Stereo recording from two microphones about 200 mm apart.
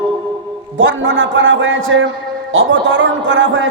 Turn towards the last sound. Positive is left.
turn(degrees=-70)  # may be behind; listen again after turning